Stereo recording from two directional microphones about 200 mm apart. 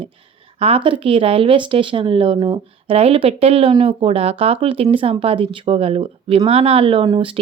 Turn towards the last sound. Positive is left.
turn(degrees=-25)  # may be behind; listen again after turning